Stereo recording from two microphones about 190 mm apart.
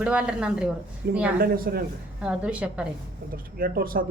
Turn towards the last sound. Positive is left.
turn(degrees=-50)  # may be behind; listen again after turning